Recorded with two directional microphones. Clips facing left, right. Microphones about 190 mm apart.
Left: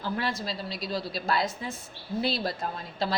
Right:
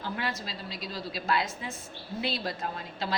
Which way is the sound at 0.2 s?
35° left (ahead or behind).